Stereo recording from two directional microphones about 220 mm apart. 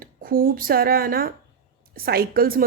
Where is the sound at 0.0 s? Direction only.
40° right (ahead or behind).